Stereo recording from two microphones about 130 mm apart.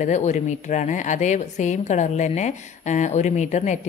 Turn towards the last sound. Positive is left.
turn(degrees=65)  # may be behind; listen again after turning